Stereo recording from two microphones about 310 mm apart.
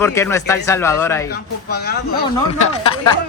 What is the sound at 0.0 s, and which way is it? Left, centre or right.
Speech, centre.